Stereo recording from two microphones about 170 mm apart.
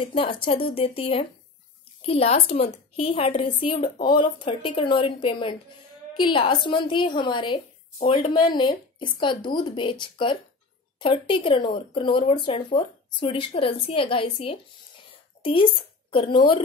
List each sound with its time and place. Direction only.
0.1 s a woman's voice: 30° left (ahead or behind)